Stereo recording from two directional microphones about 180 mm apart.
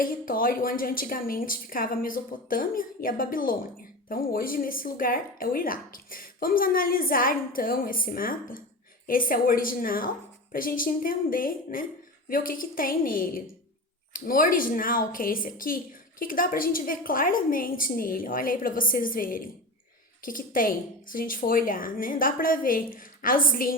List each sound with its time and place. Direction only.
0.0 s a woman's voice: 50° left (ahead or behind)